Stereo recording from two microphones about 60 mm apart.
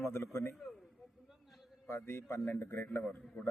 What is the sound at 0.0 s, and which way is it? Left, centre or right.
Speech, left.